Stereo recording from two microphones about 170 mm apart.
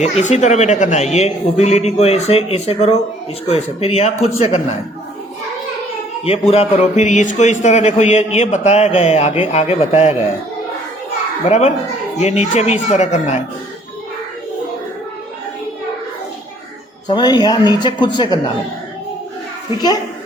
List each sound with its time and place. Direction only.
0.0 s speech: 45° left (ahead or behind)
6.5 s speech: 40° left (ahead or behind)
11.4 s speech: 40° left (ahead or behind)
17.1 s speech: 25° left (ahead or behind)